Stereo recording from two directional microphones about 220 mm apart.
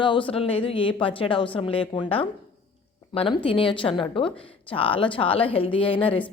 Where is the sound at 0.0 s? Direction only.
20° left (ahead or behind).